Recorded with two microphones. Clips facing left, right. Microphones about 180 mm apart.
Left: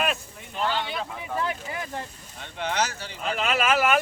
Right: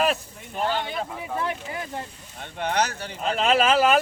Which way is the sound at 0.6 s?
45° right (ahead or behind).